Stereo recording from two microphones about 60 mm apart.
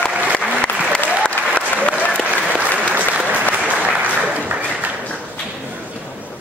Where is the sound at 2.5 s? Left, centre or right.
Right.